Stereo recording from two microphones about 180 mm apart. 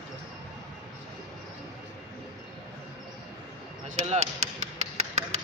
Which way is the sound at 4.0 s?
40° right (ahead or behind).